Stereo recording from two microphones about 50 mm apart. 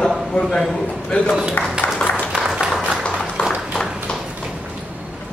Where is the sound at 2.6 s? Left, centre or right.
Centre.